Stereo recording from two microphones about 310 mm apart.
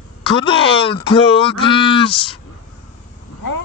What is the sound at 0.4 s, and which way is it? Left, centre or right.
Speech, centre.